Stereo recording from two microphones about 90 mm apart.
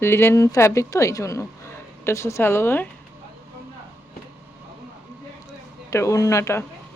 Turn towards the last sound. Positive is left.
turn(degrees=30)  # may be behind; listen again after turning